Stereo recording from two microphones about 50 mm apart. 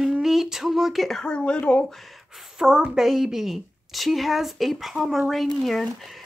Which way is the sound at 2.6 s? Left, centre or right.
Centre.